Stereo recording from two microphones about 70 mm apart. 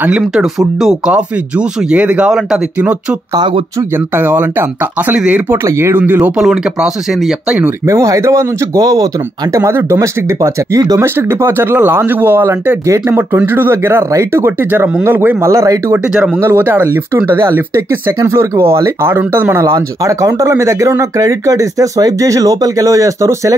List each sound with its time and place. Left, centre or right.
0.3 s speech: centre
1.1 s speech: centre
5.7 s speech: right
6.3 s speech: centre
7.8 s speech: right
8.7 s speech: right
9.6 s speech: right
11.1 s speech: right
15.5 s speech: right
16.2 s speech: right
19.7 s speech: right